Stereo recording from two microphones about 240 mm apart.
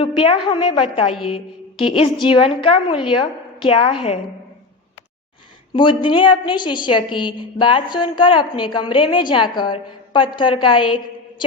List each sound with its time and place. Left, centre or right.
0.0 s a woman's voice: left
5.7 s a woman's voice: centre